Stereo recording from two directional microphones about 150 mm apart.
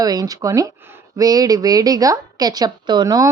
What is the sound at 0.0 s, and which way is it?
Speech, 25° right (ahead or behind).